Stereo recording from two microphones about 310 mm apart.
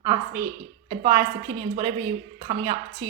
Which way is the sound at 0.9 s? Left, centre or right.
Centre.